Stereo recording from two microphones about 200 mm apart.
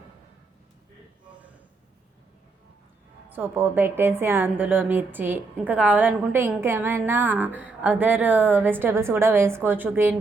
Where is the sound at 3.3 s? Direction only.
10° right (ahead or behind).